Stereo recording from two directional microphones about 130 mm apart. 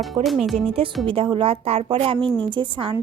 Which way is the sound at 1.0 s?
40° right (ahead or behind).